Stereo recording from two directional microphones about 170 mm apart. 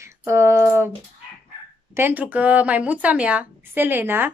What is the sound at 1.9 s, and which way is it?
A woman's voice, 10° right (ahead or behind).